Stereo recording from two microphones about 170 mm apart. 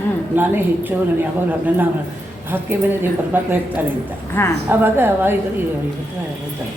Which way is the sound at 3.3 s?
10° right (ahead or behind).